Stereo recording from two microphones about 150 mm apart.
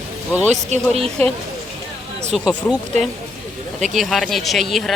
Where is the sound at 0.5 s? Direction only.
45° right (ahead or behind).